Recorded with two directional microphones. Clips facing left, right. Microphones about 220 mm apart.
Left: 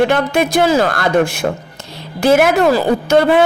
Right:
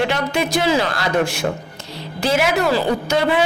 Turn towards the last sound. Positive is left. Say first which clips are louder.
# left 6 dB
turn(degrees=55)  # may be behind; listen again after turning